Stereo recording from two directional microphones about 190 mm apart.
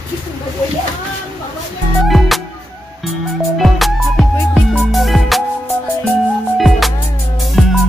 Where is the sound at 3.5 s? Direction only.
Centre (ahead or behind).